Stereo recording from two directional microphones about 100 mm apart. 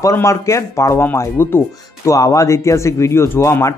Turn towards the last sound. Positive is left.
turn(degrees=30)  # may be behind; listen again after turning